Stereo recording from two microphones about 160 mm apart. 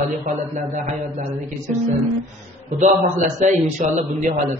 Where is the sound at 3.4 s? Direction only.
50° right (ahead or behind).